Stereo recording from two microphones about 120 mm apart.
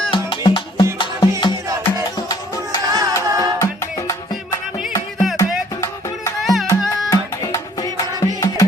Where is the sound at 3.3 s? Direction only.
30° right (ahead or behind).